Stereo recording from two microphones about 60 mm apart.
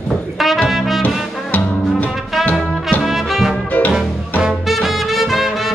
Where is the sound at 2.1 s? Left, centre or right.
Centre.